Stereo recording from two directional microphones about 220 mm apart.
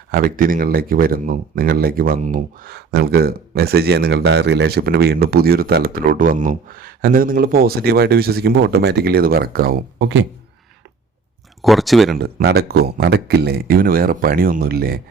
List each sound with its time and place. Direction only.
0.1 s speech: 40° right (ahead or behind)
11.6 s speech: centre (ahead or behind)
12.2 s speech: 45° right (ahead or behind)